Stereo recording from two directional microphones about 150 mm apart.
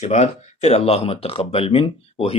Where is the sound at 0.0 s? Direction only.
45° left (ahead or behind).